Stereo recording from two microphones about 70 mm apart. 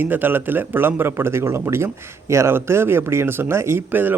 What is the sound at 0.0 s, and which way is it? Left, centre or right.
A man's voice, right.